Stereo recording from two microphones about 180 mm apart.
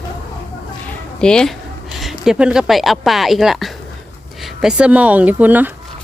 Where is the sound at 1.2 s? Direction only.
5° left (ahead or behind).